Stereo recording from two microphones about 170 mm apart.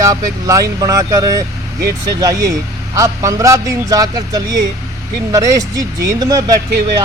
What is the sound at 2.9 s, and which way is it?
Speech, 20° right (ahead or behind).